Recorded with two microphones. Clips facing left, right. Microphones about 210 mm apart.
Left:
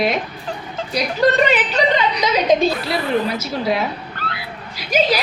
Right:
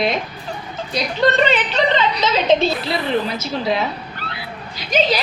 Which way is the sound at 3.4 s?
5° left (ahead or behind).